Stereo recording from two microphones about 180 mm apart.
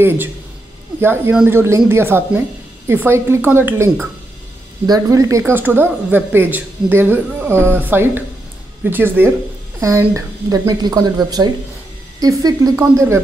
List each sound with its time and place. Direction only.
1.0 s speech: 10° right (ahead or behind)